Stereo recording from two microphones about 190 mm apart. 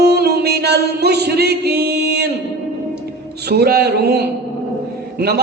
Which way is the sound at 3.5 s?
55° right (ahead or behind).